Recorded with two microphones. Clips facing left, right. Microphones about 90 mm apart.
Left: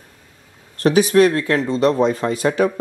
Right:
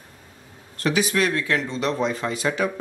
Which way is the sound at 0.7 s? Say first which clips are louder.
Left 9 dB; 40° left (ahead or behind).